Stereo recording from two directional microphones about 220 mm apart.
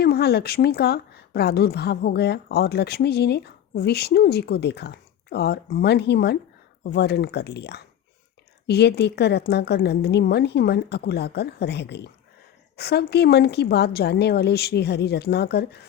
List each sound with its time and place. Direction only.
0.0 s speech: 45° left (ahead or behind)